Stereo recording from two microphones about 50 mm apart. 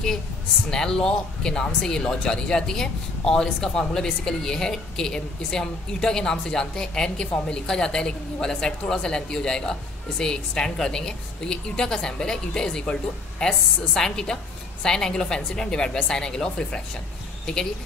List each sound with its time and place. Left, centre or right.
0.7 s speech: centre